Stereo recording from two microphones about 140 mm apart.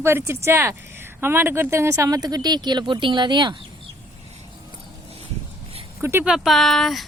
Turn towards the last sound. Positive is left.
turn(degrees=0)  # may be behind; listen again after turning